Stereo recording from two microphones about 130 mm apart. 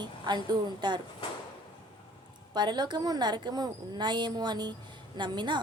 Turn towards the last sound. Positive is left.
turn(degrees=-35)  # may be behind; listen again after turning